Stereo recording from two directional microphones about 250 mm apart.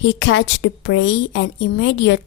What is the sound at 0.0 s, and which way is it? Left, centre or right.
A woman's voice, left.